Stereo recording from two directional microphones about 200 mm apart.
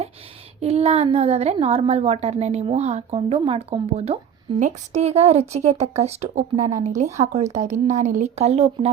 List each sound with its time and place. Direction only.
0.6 s a woman's voice: 30° right (ahead or behind)